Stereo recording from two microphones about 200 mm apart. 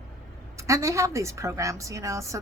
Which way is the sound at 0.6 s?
15° right (ahead or behind).